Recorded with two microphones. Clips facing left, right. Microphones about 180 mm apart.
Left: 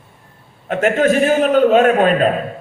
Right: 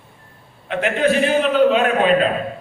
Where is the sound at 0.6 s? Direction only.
45° left (ahead or behind).